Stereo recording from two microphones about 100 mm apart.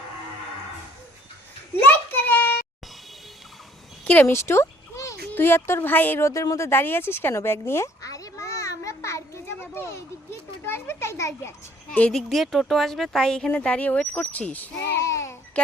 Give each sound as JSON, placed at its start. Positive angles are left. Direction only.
{"t": 1.8, "sound": "a sound", "side_deg": 15}
{"t": 4.0, "sound": "speech", "side_deg": 15}
{"t": 4.3, "sound": "speech", "side_deg": 25}
{"t": 7.7, "sound": "children playing", "side_deg": 30}
{"t": 10.7, "sound": "speech", "side_deg": 25}
{"t": 12.1, "sound": "speech", "side_deg": 0}